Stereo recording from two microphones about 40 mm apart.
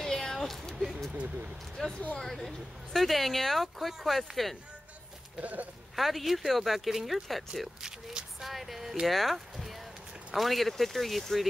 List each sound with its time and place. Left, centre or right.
0.0 s a sound: centre
1.1 s speech: right
1.8 s speech: centre
5.4 s speech: right
5.9 s speech: centre
7.8 s speech: centre
8.4 s speech: centre